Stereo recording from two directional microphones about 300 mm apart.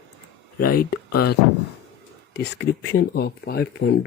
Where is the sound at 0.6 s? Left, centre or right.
Left.